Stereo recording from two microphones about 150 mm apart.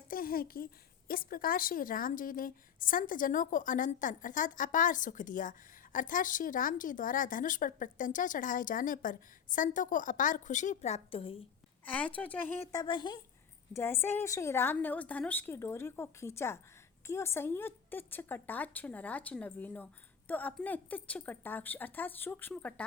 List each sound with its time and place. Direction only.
0.1 s a woman's voice: 75° left (ahead or behind); by 11.4 s 40° left (ahead or behind)
11.9 s a woman's voice: 10° left (ahead or behind)
12.7 s speech: 30° left (ahead or behind)
13.7 s a woman's voice: 15° left (ahead or behind)